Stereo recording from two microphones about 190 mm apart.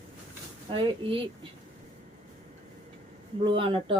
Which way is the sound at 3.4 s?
25° right (ahead or behind).